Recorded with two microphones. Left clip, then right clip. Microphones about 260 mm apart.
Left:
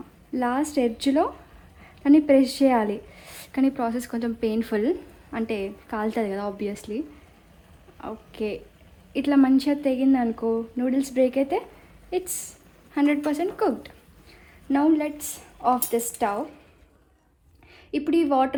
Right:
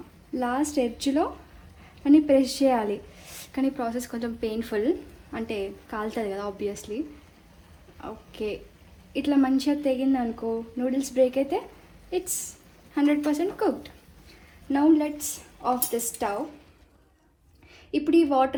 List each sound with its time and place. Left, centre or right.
0.3 s a woman's voice: left
8.0 s a woman's voice: left
17.9 s a woman's voice: left